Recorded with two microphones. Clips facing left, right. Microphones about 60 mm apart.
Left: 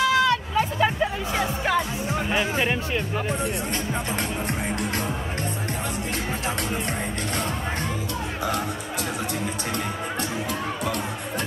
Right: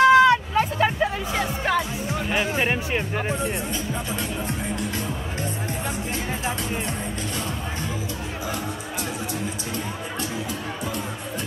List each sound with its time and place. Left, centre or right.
0.0 s hubbub: right
0.6 s music: centre
1.3 s music: centre
2.6 s speech: right
4.5 s music: left